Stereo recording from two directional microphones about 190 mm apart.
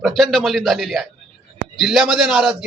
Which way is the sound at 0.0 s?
Centre (ahead or behind).